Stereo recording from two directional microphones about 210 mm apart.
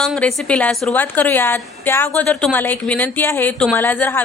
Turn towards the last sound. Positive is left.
turn(degrees=10)  # may be behind; listen again after turning